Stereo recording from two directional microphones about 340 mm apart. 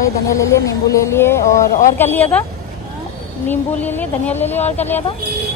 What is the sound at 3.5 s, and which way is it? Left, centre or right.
Speech, centre.